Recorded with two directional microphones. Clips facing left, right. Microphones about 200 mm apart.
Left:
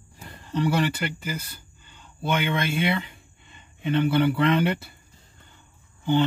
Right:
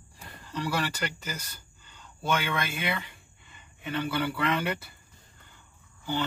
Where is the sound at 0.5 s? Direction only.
20° left (ahead or behind).